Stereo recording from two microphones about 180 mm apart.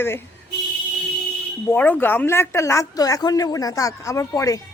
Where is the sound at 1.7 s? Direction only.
10° left (ahead or behind).